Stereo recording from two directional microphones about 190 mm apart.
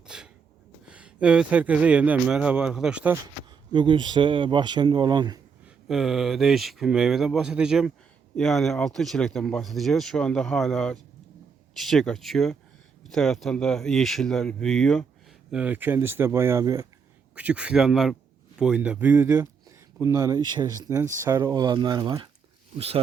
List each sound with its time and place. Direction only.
0.1 s a sound: 5° right (ahead or behind)
0.9 s speech: 5° right (ahead or behind)
3.7 s speech: 25° right (ahead or behind)
5.9 s speech: centre (ahead or behind); by 16.8 s 20° right (ahead or behind)
17.3 s speech: 5° right (ahead or behind)